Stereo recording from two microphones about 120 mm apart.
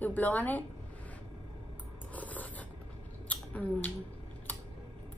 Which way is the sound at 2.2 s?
15° left (ahead or behind).